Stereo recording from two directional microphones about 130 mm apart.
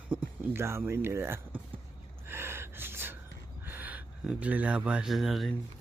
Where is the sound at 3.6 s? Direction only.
15° right (ahead or behind).